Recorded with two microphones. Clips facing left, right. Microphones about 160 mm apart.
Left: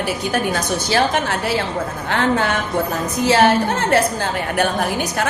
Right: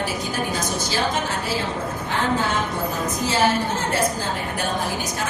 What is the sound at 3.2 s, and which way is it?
Speech, 70° left (ahead or behind).